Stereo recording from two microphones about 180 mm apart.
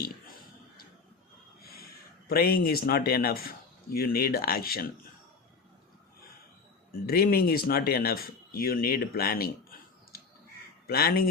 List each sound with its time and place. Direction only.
0.0 s a sound: 55° left (ahead or behind)
2.3 s speech: 55° left (ahead or behind)
6.9 s speech: 60° left (ahead or behind)